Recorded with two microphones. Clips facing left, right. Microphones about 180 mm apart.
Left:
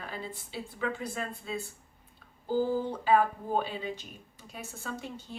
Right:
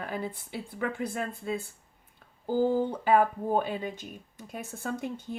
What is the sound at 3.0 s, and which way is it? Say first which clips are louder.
A woman's voice: even; 55° right (ahead or behind).